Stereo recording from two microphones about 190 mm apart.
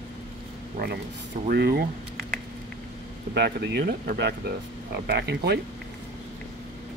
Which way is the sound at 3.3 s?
60° right (ahead or behind).